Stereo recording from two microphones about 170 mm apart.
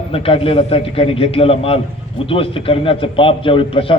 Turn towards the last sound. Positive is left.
turn(degrees=30)  # may be behind; listen again after turning